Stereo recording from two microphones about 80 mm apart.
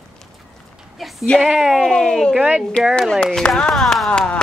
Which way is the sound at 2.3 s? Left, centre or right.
Centre.